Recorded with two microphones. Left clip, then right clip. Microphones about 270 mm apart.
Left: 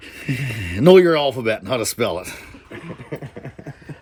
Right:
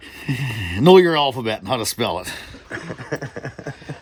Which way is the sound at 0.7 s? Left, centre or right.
Centre.